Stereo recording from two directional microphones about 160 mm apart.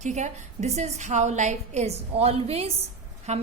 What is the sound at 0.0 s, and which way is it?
A woman's voice, 45° right (ahead or behind).